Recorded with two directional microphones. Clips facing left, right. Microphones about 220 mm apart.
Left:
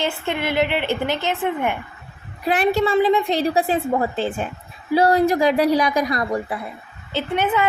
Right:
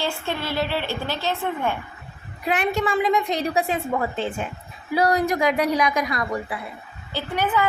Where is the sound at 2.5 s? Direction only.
35° left (ahead or behind).